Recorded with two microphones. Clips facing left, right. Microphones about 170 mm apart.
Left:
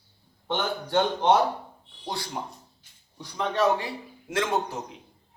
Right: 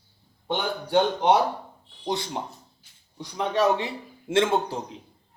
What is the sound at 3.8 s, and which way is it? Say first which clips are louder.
Speech: right 3 dB; 25° right (ahead or behind).